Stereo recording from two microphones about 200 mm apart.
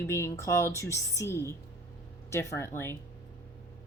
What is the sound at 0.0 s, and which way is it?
Speech, 15° left (ahead or behind).